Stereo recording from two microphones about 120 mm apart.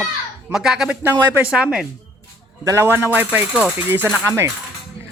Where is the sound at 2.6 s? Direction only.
25° right (ahead or behind).